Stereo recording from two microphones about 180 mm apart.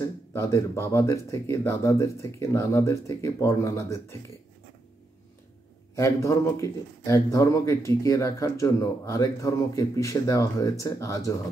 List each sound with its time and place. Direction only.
0.0 s speech: 15° left (ahead or behind)
5.9 s speech: 15° left (ahead or behind)